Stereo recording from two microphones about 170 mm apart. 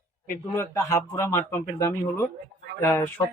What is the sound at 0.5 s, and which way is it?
A man's voice, 15° left (ahead or behind).